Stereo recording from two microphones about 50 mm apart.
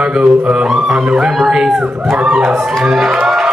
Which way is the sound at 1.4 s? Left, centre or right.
Centre.